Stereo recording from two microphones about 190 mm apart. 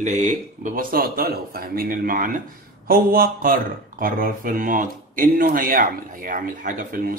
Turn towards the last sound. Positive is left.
turn(degrees=-45)  # may be behind; listen again after turning